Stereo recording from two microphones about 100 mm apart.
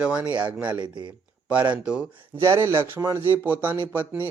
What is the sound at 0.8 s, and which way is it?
Speech, 50° right (ahead or behind).